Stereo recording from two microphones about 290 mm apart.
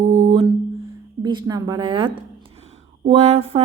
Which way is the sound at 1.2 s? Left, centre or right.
Centre.